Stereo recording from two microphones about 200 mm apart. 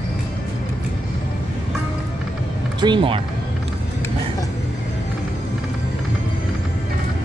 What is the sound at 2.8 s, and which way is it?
Speech, 25° right (ahead or behind).